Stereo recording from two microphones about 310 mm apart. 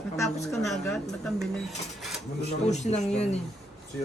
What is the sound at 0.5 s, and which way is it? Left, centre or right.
Speech, centre.